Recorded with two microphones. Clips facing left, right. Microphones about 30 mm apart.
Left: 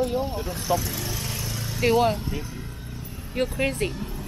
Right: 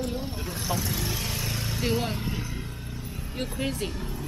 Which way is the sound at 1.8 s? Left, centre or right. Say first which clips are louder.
Left 9 dB; centre.